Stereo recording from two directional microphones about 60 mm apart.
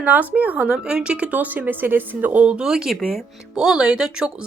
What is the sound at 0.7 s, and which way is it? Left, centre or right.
Speech, centre.